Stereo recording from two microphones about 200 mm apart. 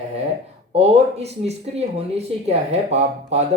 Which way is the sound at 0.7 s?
30° right (ahead or behind).